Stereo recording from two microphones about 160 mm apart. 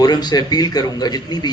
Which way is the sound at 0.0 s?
25° left (ahead or behind).